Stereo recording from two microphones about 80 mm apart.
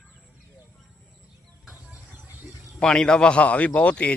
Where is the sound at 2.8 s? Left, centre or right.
Centre.